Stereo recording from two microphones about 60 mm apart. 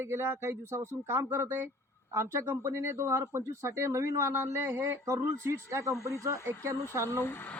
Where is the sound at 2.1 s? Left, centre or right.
Right.